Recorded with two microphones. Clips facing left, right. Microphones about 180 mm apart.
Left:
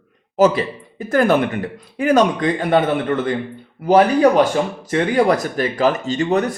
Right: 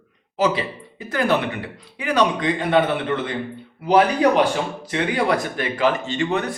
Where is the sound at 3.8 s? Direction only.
45° left (ahead or behind).